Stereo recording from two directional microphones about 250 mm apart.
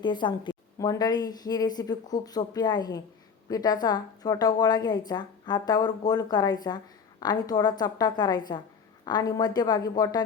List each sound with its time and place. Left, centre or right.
0.0 s a woman's voice: centre